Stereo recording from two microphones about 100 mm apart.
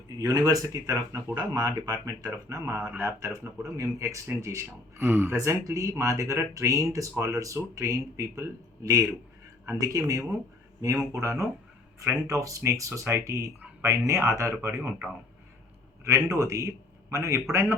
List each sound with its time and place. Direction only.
0.2 s speech: 35° right (ahead or behind)
14.8 s speech: 15° right (ahead or behind)
16.0 s a man's voice: 35° right (ahead or behind)